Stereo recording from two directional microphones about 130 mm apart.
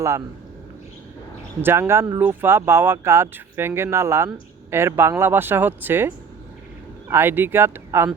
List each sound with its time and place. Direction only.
1.6 s speech: 20° right (ahead or behind)